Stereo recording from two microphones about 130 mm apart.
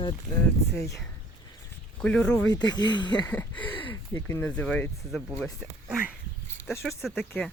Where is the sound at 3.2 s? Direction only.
10° left (ahead or behind).